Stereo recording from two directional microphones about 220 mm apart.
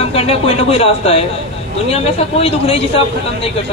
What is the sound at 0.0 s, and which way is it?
Speech, 25° left (ahead or behind).